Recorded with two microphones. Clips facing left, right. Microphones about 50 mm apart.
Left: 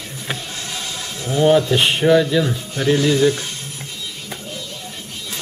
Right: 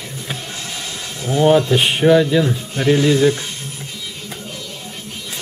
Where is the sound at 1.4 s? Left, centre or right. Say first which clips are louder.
Right 1 dB; centre.